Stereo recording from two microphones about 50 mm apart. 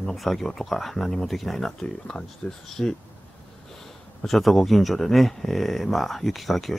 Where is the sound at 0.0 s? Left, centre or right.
Centre.